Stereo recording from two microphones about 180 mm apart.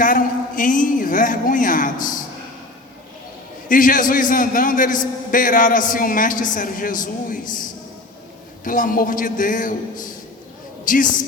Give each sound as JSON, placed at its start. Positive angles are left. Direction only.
{"t": 0.0, "sound": "a man's voice", "side_deg": 50}
{"t": 3.7, "sound": "a man's voice", "side_deg": 50}
{"t": 10.8, "sound": "a man's voice", "side_deg": 50}